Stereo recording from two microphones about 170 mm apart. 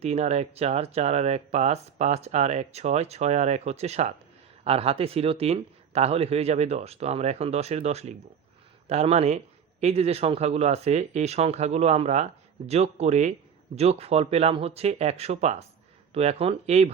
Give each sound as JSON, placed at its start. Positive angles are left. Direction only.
{"t": 0.0, "sound": "speech", "side_deg": -40}